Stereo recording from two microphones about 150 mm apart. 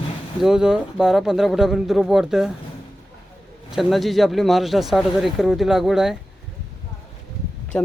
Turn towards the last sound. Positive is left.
turn(degrees=10)  # may be behind; listen again after turning